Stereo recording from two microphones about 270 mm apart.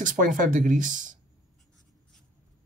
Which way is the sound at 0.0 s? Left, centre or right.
Right.